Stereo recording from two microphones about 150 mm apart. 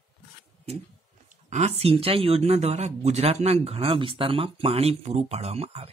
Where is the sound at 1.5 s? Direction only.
45° right (ahead or behind).